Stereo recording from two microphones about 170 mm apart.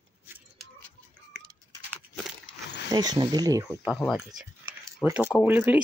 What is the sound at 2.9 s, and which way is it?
Speech, 25° right (ahead or behind).